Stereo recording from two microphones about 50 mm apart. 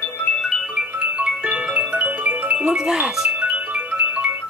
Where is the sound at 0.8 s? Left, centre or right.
Right.